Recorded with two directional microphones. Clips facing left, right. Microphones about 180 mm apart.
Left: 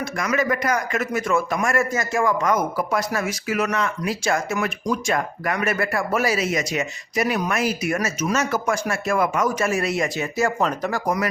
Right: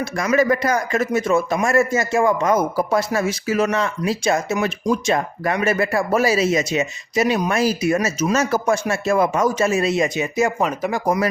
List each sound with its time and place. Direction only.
0.0 s a man's voice: 30° right (ahead or behind)
10.6 s speech: 10° right (ahead or behind)
10.9 s a man's voice: 25° right (ahead or behind)